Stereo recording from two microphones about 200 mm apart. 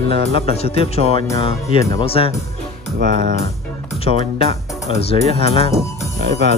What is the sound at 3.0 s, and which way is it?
Speech, 45° right (ahead or behind).